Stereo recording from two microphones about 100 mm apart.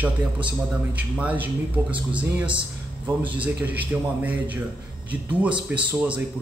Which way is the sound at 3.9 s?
15° right (ahead or behind).